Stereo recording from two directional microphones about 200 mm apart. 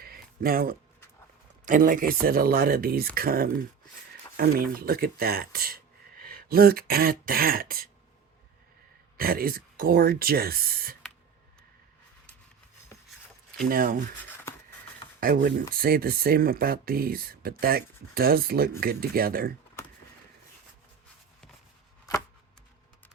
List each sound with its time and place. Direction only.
0.0 s a sound: 50° right (ahead or behind)
1.6 s speech: 40° right (ahead or behind)
9.1 s speech: 50° right (ahead or behind)
13.7 s speech: 45° right (ahead or behind)
14.3 s a sound: 10° left (ahead or behind)
15.2 s speech: 45° right (ahead or behind)